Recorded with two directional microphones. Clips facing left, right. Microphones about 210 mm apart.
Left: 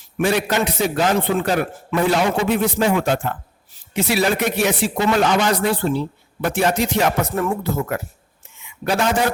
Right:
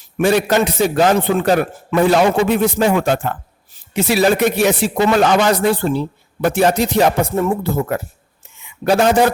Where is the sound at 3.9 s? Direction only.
40° right (ahead or behind).